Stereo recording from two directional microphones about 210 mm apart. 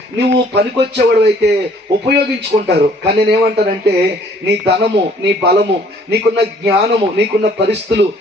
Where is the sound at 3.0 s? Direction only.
50° right (ahead or behind).